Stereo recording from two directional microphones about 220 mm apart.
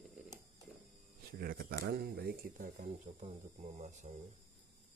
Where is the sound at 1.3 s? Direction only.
45° right (ahead or behind).